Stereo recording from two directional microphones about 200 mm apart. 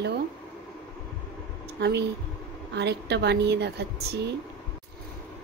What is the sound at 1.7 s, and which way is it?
A woman's voice, 55° right (ahead or behind).